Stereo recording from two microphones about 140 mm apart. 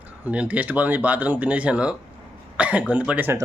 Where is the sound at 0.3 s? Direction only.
10° right (ahead or behind).